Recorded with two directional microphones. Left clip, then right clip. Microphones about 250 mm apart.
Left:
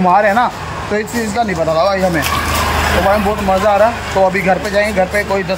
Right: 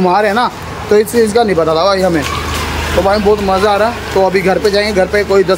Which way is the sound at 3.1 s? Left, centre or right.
Centre.